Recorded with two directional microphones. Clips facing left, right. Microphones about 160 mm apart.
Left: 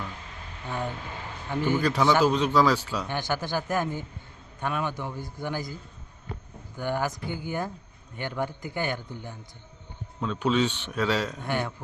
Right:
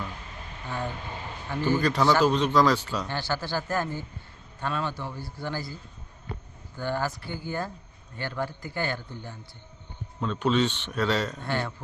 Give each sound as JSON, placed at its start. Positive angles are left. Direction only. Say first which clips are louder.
{"t": 1.5, "sound": "a man's voice", "louder": "even", "side_deg": 15}
{"t": 6.7, "sound": "a man's voice", "louder": "left 1 dB", "side_deg": 15}